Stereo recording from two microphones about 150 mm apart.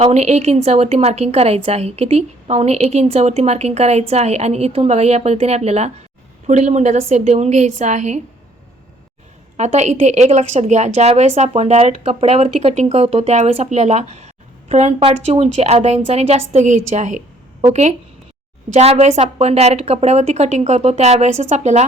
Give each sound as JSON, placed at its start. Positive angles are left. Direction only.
{"t": 0.0, "sound": "a woman's voice", "side_deg": -45}
{"t": 9.6, "sound": "a woman's voice", "side_deg": -50}